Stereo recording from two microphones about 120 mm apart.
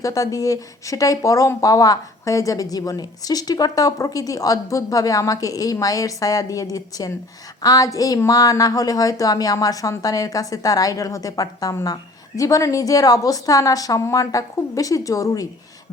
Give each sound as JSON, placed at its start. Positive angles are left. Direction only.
{"t": 0.0, "sound": "speech", "side_deg": 30}